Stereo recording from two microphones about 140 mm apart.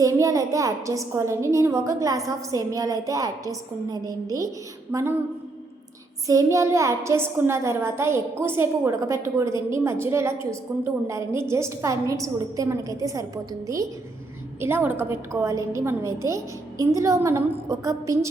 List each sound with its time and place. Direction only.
0.0 s a woman's voice: 25° right (ahead or behind)
6.2 s a woman's voice: 20° right (ahead or behind)